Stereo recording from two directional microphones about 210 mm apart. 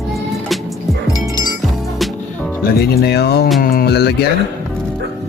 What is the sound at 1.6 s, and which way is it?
Music, centre (ahead or behind).